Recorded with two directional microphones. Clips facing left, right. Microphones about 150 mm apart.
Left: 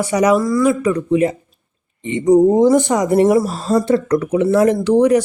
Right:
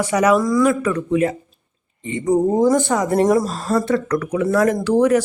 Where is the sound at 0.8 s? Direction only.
15° left (ahead or behind).